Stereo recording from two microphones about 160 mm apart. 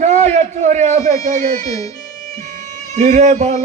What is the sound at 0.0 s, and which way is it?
A man's voice, 45° right (ahead or behind).